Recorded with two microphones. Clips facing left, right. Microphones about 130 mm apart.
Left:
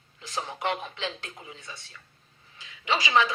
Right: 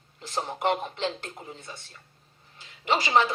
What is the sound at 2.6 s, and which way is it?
Speech, 20° right (ahead or behind).